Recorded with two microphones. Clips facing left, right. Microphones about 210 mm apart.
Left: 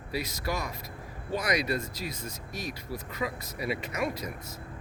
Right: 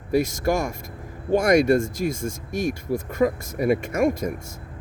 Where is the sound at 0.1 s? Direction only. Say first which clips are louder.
Right 12 dB; 50° right (ahead or behind).